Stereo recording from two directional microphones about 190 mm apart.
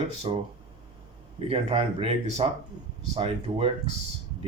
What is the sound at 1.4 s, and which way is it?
Speech, 30° right (ahead or behind).